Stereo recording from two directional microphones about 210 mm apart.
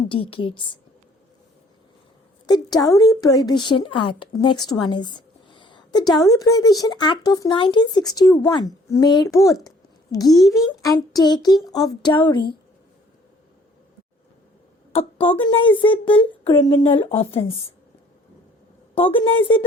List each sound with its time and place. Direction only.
0.1 s a woman's voice: 25° left (ahead or behind)
2.5 s a woman's voice: 20° left (ahead or behind)
14.9 s a woman's voice: 25° left (ahead or behind)
18.9 s a woman's voice: 25° left (ahead or behind)